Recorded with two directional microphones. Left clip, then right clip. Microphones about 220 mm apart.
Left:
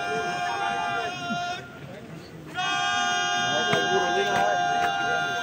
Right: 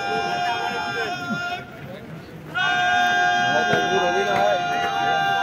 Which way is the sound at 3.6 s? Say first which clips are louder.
Right 3 dB; 10° left (ahead or behind).